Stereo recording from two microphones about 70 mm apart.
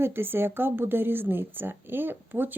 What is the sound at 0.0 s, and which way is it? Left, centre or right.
Speech, right.